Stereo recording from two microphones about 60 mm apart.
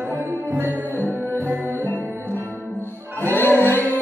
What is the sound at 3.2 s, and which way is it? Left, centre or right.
Music, left.